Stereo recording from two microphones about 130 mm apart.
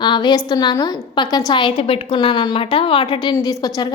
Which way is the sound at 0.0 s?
35° left (ahead or behind).